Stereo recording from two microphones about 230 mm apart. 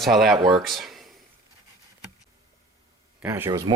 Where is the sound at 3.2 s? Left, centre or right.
Centre.